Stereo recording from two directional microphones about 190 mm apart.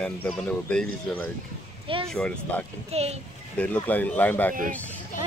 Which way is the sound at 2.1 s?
5° left (ahead or behind).